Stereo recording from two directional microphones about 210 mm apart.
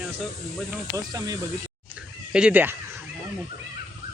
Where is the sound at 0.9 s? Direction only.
15° right (ahead or behind).